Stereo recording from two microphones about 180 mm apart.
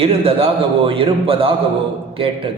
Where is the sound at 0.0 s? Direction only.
30° right (ahead or behind).